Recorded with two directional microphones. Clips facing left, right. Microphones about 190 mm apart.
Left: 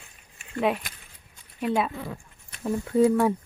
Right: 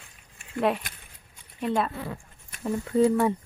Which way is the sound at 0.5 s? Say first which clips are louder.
Even; centre (ahead or behind).